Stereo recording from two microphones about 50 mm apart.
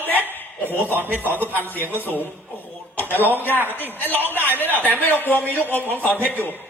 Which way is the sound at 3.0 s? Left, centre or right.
Left.